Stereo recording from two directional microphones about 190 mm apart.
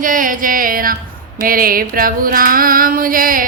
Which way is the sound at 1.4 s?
50° right (ahead or behind).